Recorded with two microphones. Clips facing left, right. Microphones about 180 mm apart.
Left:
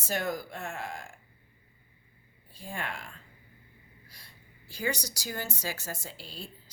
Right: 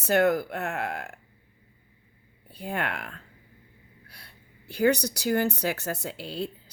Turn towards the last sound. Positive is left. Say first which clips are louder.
# right 11 dB
turn(degrees=-65)  # may be behind; listen again after turning